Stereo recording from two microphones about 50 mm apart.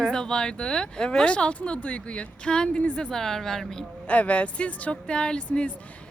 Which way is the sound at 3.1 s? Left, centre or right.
Centre.